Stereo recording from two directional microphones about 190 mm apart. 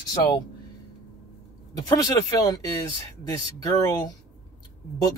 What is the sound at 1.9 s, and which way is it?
Speech, 20° left (ahead or behind).